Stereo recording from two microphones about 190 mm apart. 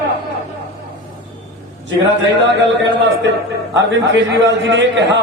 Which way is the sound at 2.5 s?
70° right (ahead or behind).